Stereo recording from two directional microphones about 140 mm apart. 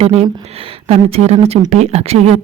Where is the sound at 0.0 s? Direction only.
50° right (ahead or behind).